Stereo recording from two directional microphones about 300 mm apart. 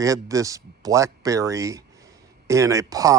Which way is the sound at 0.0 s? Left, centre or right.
Centre.